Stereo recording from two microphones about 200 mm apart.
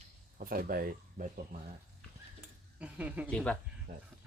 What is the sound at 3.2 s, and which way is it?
Speech, 5° left (ahead or behind).